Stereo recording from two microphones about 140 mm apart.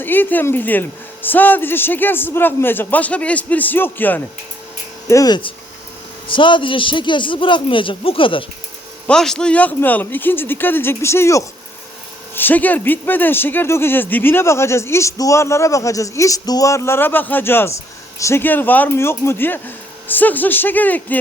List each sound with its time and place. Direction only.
0.0 s speech: 15° left (ahead or behind)
5.0 s a man's voice: 25° left (ahead or behind)
9.0 s speech: 5° left (ahead or behind)